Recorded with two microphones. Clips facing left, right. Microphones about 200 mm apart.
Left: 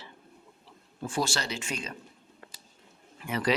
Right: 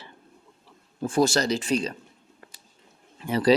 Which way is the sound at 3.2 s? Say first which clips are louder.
Right 8 dB; 30° right (ahead or behind).